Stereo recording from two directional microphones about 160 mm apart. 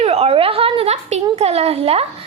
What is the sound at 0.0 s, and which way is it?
A woman's voice, 40° right (ahead or behind).